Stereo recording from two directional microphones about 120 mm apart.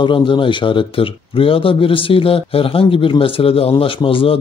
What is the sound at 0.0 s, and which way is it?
Speech, 45° left (ahead or behind).